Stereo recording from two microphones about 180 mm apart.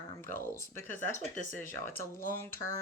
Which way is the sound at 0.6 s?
15° left (ahead or behind).